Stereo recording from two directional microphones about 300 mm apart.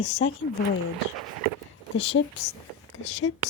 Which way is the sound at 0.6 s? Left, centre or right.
Left.